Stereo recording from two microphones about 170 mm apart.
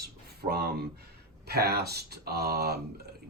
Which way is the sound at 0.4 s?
65° right (ahead or behind).